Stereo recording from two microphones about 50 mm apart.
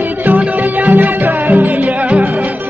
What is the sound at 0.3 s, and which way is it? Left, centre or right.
Music, right.